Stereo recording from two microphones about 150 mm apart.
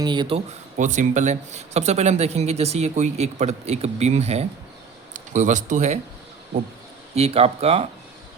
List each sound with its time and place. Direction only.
0.0 s speech: 30° right (ahead or behind)
0.8 s speech: 55° right (ahead or behind)
7.2 s speech: 40° right (ahead or behind)